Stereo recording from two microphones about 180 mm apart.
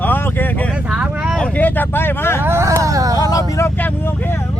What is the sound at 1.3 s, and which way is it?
Speech, 5° left (ahead or behind).